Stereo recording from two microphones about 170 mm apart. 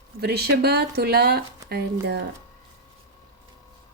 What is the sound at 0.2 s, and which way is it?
Speech, 70° right (ahead or behind).